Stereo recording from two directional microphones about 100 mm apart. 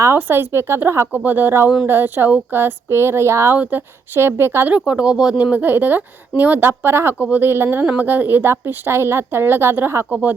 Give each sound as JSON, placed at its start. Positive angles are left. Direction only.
{"t": 0.2, "sound": "speech", "side_deg": -20}
{"t": 10.1, "sound": "speech", "side_deg": -10}